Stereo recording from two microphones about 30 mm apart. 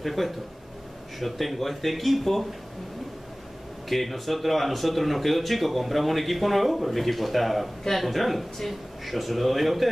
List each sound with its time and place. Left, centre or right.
0.0 s speech: centre
3.9 s speech: centre